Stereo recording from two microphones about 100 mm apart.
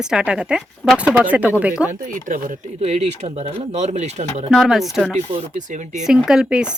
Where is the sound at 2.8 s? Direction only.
90° right.